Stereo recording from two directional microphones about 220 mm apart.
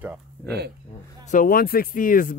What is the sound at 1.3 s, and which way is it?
Speech, 40° left (ahead or behind).